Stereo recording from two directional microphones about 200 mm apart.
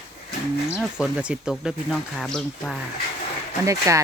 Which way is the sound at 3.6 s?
15° right (ahead or behind).